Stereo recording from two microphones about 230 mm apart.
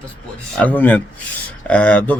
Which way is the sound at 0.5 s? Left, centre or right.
Centre.